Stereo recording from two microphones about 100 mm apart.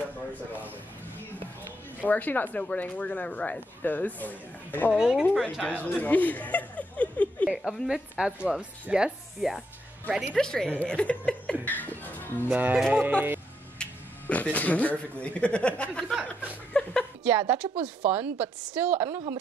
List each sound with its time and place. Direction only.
0.3 s a woman's voice: 15° right (ahead or behind)
2.0 s speech: 15° left (ahead or behind)
4.9 s speech: 5° right (ahead or behind)
5.3 s speech: 5° left (ahead or behind)
5.9 s a sound: 15° left (ahead or behind)
7.4 s speech: 5° right (ahead or behind)
10.3 s speech: 5° left (ahead or behind)
11.6 s music: 15° left (ahead or behind)
12.5 s a woman's voice: 15° right (ahead or behind)
13.7 s speech: 15° left (ahead or behind)
16.7 s chuckle: 10° left (ahead or behind)
17.2 s a woman's voice: 20° right (ahead or behind)